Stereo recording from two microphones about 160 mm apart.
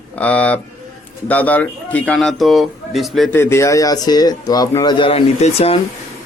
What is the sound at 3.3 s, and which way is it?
A man's voice, 15° left (ahead or behind).